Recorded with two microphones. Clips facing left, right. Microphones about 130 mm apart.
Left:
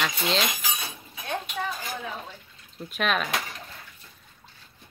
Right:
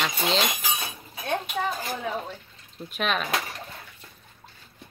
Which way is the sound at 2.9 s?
Centre (ahead or behind).